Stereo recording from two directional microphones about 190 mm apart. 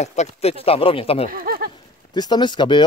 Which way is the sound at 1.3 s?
50° right (ahead or behind).